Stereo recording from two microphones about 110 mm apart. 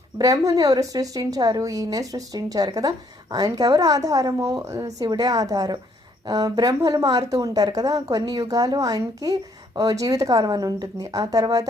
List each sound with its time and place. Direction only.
0.2 s speech: 35° right (ahead or behind)